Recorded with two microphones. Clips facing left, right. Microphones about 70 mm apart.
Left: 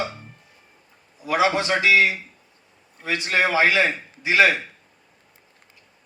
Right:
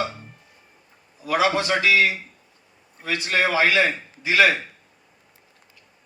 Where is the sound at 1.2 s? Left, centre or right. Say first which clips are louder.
Even; left.